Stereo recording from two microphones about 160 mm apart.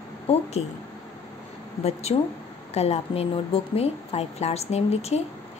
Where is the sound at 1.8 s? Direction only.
40° left (ahead or behind).